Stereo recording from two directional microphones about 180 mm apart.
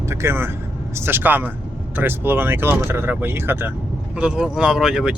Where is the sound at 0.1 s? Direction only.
15° right (ahead or behind).